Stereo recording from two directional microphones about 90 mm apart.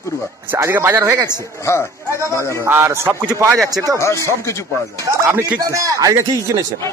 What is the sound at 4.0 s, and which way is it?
Speech, 30° left (ahead or behind).